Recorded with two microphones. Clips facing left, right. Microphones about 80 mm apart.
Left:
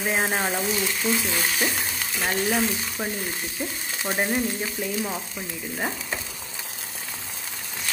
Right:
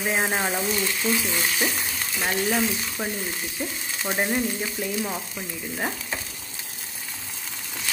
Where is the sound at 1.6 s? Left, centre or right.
Centre.